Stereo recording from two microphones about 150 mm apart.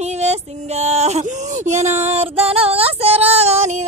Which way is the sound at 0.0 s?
45° right (ahead or behind).